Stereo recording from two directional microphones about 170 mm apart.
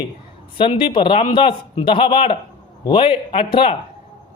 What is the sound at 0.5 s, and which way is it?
A woman's voice, 30° left (ahead or behind).